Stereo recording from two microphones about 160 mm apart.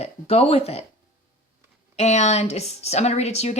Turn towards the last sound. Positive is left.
turn(degrees=45)  # may be behind; listen again after turning